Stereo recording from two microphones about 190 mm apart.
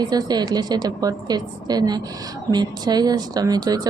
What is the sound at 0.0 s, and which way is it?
Speech, 20° right (ahead or behind).